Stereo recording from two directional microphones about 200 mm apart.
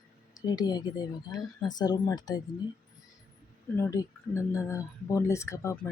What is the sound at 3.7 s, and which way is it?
Speech, 15° left (ahead or behind).